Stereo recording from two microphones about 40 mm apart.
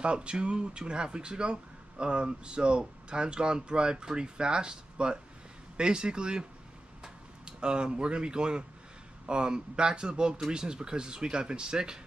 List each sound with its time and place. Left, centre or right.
0.0 s speech: right